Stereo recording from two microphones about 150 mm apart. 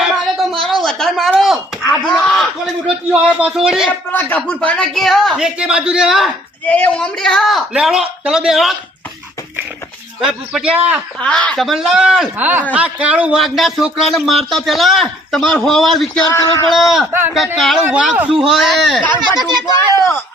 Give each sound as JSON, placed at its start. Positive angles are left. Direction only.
{"t": 0.0, "sound": "a sound", "side_deg": 0}
{"t": 4.1, "sound": "a man's voice", "side_deg": 10}
{"t": 6.7, "sound": "a man's voice", "side_deg": 10}
{"t": 10.2, "sound": "a man's voice", "side_deg": -5}
{"t": 11.2, "sound": "a man's voice", "side_deg": 10}
{"t": 16.3, "sound": "a sound", "side_deg": 20}
{"t": 16.6, "sound": "a man's voice", "side_deg": 0}
{"t": 17.1, "sound": "a man's voice", "side_deg": -15}
{"t": 17.3, "sound": "a man's voice", "side_deg": 0}
{"t": 19.9, "sound": "a sound", "side_deg": 20}